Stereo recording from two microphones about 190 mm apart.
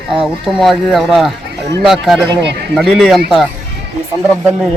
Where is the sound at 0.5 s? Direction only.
Centre (ahead or behind).